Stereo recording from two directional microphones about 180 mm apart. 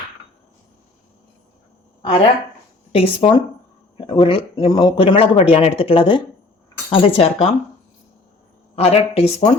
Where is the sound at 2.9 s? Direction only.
30° left (ahead or behind).